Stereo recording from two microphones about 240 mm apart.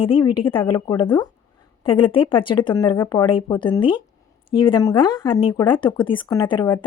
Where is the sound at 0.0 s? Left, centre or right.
Left.